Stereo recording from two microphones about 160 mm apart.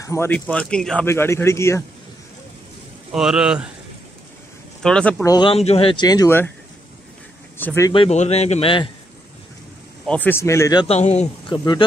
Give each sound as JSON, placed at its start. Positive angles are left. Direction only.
{"t": 0.0, "sound": "speech", "side_deg": 20}
{"t": 0.3, "sound": "speech", "side_deg": 5}
{"t": 3.1, "sound": "speech", "side_deg": -5}
{"t": 4.8, "sound": "speech", "side_deg": 5}
{"t": 5.2, "sound": "speech", "side_deg": 25}
{"t": 5.5, "sound": "a man's voice", "side_deg": 40}
{"t": 7.5, "sound": "speech", "side_deg": 15}
{"t": 7.9, "sound": "a man's voice", "side_deg": 40}
{"t": 10.0, "sound": "speech", "side_deg": 10}
{"t": 10.9, "sound": "speech", "side_deg": 45}
{"t": 11.4, "sound": "speech", "side_deg": 30}